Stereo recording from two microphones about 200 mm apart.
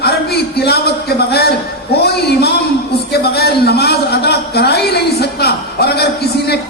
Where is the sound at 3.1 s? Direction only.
55° left (ahead or behind).